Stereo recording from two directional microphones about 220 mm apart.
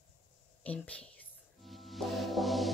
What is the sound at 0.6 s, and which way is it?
Speech, 5° left (ahead or behind).